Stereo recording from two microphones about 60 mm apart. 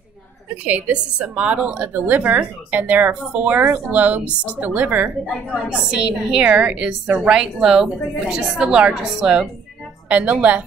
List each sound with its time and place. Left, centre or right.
0.7 s a woman's voice: right
5.7 s a woman's voice: centre